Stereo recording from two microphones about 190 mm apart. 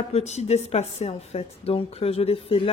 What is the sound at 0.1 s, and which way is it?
Speech, 35° left (ahead or behind).